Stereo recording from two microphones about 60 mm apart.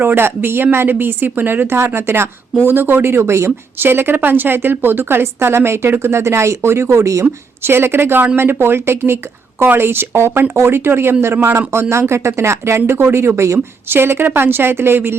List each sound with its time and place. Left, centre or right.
0.0 s speech: right
3.8 s speech: right
7.6 s speech: right